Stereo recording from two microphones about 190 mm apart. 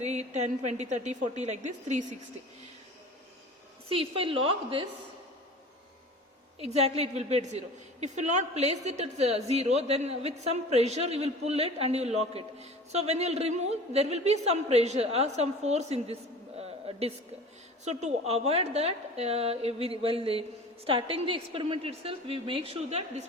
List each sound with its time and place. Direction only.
0.0 s a man's voice: 35° right (ahead or behind)
3.8 s a woman's voice: 30° right (ahead or behind)
6.6 s a man's voice: 35° right (ahead or behind)
16.6 s a sound: 30° right (ahead or behind)
17.8 s a man's voice: 35° right (ahead or behind)